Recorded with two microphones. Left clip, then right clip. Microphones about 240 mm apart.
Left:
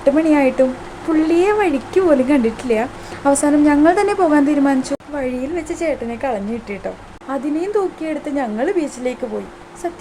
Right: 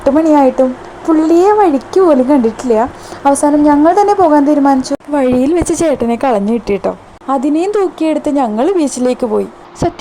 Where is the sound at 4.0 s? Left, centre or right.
Centre.